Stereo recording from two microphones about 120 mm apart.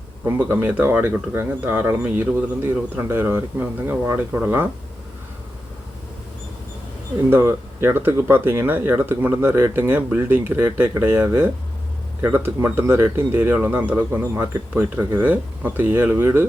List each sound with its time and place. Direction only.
0.3 s speech: 20° right (ahead or behind)
7.3 s speech: 20° right (ahead or behind)